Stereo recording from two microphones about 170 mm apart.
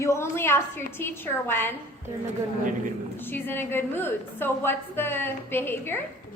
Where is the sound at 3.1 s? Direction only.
10° left (ahead or behind).